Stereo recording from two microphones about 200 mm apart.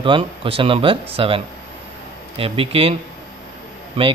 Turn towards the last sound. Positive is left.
turn(degrees=-30)  # may be behind; listen again after turning